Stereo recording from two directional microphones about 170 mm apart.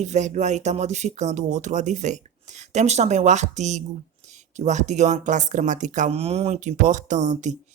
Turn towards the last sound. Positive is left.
turn(degrees=-45)  # may be behind; listen again after turning